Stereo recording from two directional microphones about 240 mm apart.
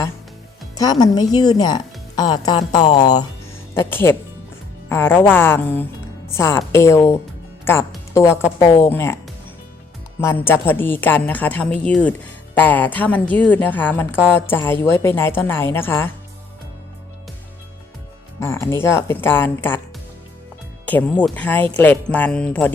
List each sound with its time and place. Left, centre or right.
0.8 s a woman's voice: centre
18.3 s a woman's voice: centre
20.8 s a woman's voice: centre